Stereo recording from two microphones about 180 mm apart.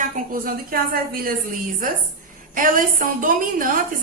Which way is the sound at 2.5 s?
50° right (ahead or behind).